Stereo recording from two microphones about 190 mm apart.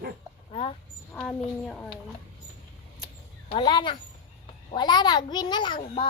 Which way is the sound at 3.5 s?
25° left (ahead or behind).